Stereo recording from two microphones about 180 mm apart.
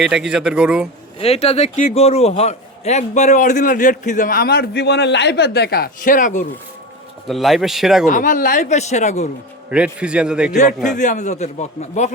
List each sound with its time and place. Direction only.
0.0 s a man's voice: 5° right (ahead or behind)
1.2 s a man's voice: 35° left (ahead or behind)
7.3 s a man's voice: centre (ahead or behind)
8.1 s speech: 45° left (ahead or behind)
9.6 s a man's voice: 5° right (ahead or behind)
10.9 s speech: 45° left (ahead or behind)